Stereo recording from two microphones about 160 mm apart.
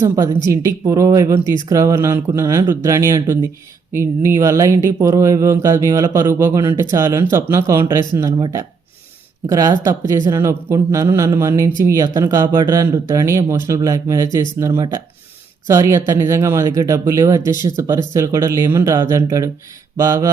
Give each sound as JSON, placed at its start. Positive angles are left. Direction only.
{"t": 0.0, "sound": "speech", "side_deg": -20}
{"t": 9.5, "sound": "speech", "side_deg": -25}